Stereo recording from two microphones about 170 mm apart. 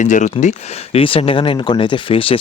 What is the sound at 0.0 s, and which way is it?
Speech, 45° left (ahead or behind).